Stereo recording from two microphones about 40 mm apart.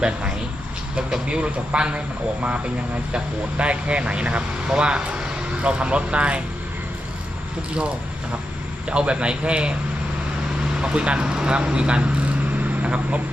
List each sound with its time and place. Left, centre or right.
1.1 s speech: right
3.6 s speech: right
7.7 s speech: right
10.8 s speech: right